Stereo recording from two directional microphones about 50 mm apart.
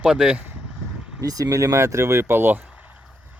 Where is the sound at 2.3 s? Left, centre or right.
Right.